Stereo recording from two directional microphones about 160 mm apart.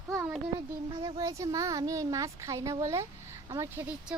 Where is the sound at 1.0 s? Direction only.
20° right (ahead or behind).